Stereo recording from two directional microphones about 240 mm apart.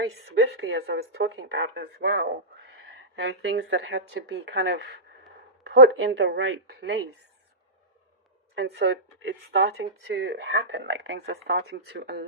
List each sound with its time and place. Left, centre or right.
0.0 s speech: right
8.5 s speech: right